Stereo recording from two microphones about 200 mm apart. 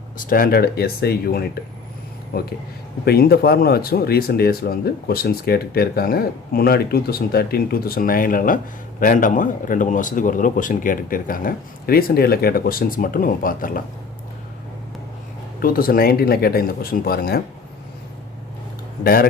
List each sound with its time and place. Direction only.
0.2 s speech: 45° left (ahead or behind)
15.6 s speech: 45° left (ahead or behind)
19.0 s speech: 50° left (ahead or behind)